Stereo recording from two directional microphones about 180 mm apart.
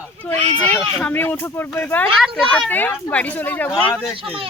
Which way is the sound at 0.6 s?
5° left (ahead or behind).